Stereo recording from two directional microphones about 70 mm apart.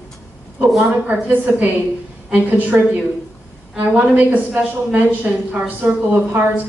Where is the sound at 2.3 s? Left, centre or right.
Right.